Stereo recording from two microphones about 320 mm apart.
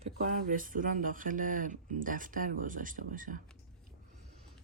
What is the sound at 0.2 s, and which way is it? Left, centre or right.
Speech, right.